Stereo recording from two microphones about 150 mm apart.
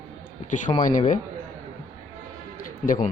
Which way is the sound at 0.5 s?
60° left (ahead or behind).